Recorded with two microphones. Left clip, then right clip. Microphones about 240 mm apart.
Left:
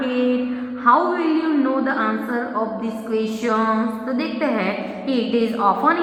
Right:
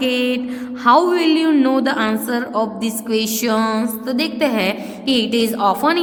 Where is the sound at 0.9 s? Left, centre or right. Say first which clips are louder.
Right 3 dB; right.